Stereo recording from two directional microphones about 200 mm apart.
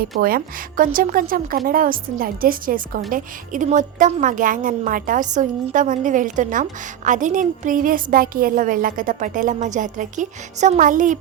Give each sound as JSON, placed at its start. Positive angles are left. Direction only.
{"t": 0.2, "sound": "a woman's voice", "side_deg": -45}